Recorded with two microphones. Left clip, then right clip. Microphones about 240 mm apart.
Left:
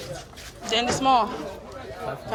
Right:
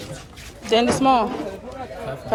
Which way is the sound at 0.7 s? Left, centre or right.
Left.